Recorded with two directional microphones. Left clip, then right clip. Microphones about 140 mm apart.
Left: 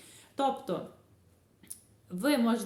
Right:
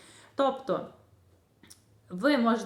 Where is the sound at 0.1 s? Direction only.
20° left (ahead or behind).